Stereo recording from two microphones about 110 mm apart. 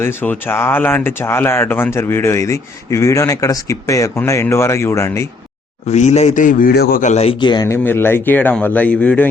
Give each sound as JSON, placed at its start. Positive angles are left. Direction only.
{"t": 0.0, "sound": "speech", "side_deg": 20}
{"t": 5.9, "sound": "speech", "side_deg": 85}
{"t": 7.1, "sound": "speech", "side_deg": 70}
{"t": 7.3, "sound": "speech", "side_deg": 45}
{"t": 7.7, "sound": "speech", "side_deg": 20}